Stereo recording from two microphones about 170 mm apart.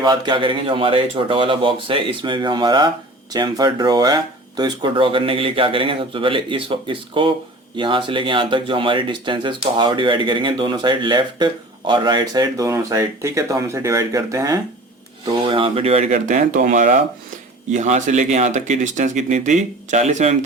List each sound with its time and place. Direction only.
0.0 s speech: 25° right (ahead or behind); by 20.3 s 45° right (ahead or behind)